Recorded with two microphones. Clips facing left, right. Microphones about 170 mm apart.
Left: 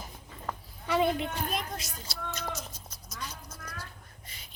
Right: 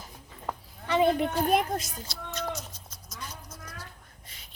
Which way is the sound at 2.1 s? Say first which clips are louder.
Even; centre (ahead or behind).